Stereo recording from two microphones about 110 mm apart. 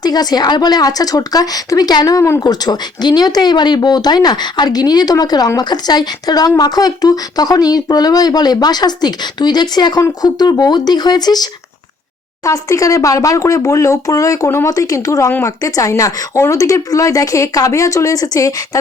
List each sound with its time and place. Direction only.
0.0 s a woman's voice: 35° left (ahead or behind)
12.5 s speech: 30° left (ahead or behind)